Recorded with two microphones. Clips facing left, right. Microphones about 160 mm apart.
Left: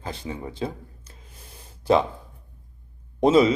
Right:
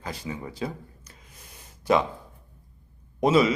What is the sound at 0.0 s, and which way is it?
Gasp, 25° left (ahead or behind).